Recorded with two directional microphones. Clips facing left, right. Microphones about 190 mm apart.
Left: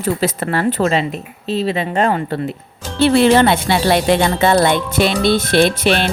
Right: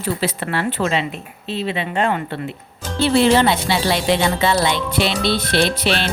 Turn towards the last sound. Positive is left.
turn(degrees=50)  # may be behind; listen again after turning